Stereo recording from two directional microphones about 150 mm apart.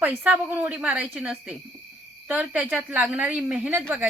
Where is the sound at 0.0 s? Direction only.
10° right (ahead or behind).